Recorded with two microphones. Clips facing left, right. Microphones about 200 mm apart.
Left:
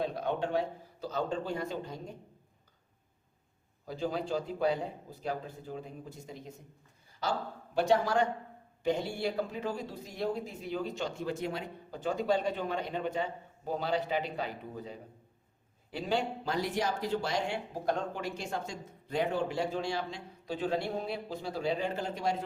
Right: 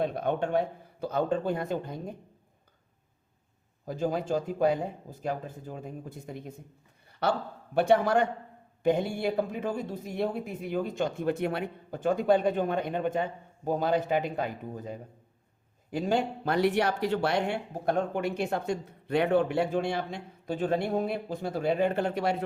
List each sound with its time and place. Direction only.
0.0 s speech: 55° right (ahead or behind)
3.8 s speech: 50° right (ahead or behind); by 22.4 s 65° right (ahead or behind)